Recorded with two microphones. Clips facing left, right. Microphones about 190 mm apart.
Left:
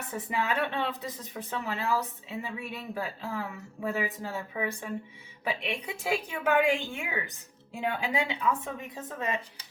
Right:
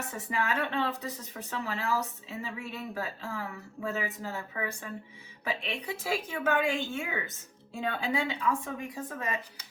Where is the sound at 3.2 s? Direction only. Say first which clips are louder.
Left 2 dB; 20° left (ahead or behind).